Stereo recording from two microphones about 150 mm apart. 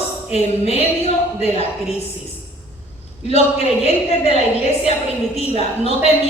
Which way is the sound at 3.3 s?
45° left (ahead or behind).